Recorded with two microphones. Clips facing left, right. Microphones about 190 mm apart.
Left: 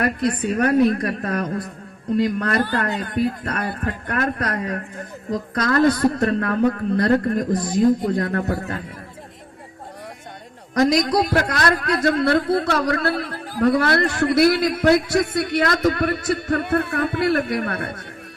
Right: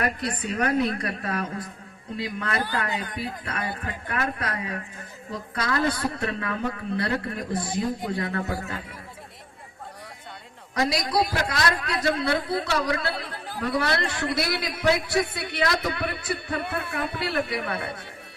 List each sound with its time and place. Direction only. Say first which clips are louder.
0.0 s a man's voice: left 7 dB; 45° left (ahead or behind)
11.3 s a man's voice: left 6 dB; 55° left (ahead or behind)